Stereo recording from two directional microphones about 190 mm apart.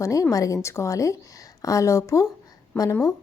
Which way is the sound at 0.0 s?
15° left (ahead or behind).